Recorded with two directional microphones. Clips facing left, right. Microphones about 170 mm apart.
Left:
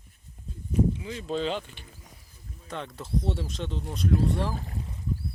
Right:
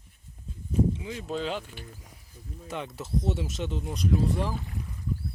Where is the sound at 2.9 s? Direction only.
5° right (ahead or behind).